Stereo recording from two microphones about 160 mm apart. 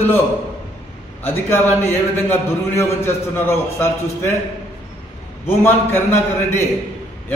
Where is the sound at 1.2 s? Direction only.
15° left (ahead or behind).